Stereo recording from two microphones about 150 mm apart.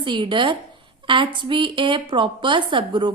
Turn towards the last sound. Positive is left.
turn(degrees=-35)  # may be behind; listen again after turning